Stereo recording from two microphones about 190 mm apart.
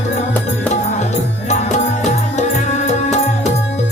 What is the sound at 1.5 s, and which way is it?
Music, 40° left (ahead or behind).